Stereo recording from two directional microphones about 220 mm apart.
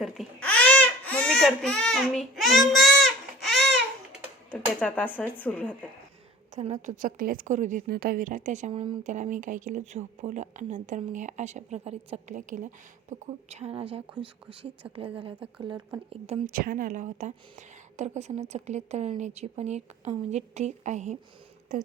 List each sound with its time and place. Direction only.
0.0 s babbling: 5° left (ahead or behind)
4.8 s speech: 5° left (ahead or behind)
6.5 s a woman's voice: 30° right (ahead or behind)
15.2 s speech: 25° right (ahead or behind)
16.5 s a woman's voice: 40° right (ahead or behind)